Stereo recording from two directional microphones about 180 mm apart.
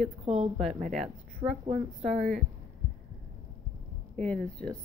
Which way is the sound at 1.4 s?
35° right (ahead or behind).